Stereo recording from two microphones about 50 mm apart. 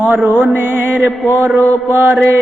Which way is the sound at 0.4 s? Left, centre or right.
Right.